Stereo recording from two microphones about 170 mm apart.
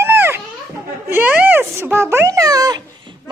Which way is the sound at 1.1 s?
10° right (ahead or behind).